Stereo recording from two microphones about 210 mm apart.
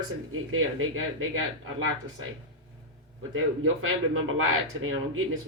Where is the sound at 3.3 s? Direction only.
75° right (ahead or behind).